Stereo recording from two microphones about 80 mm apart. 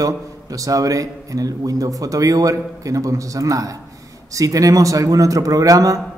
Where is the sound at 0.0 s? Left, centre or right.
Right.